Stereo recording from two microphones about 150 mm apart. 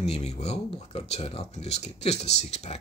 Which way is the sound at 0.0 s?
45° left (ahead or behind).